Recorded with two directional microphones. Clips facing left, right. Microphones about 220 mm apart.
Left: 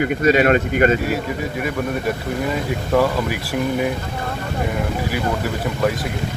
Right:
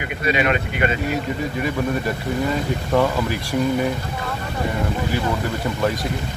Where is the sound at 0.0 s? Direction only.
45° left (ahead or behind).